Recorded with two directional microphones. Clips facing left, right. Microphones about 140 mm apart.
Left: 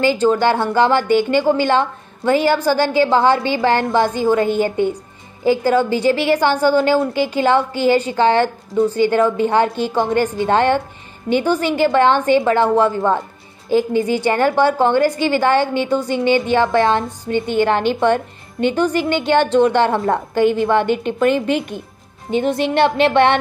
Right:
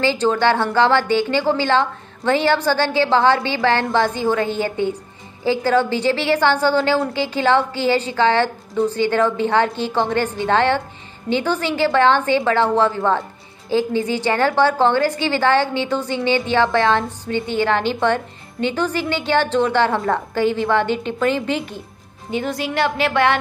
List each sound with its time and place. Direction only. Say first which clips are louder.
0.0 s a woman's voice: left 2 dB; 15° left (ahead or behind)
15.6 s a woman's voice: left 3 dB; 50° left (ahead or behind)
15.9 s a woman's voice: left 4 dB; 15° left (ahead or behind)